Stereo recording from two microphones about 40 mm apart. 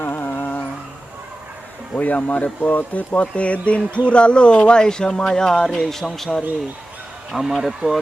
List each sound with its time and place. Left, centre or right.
0.0 s music: left
2.0 s speech: left; by 6.4 s centre
7.3 s speech: right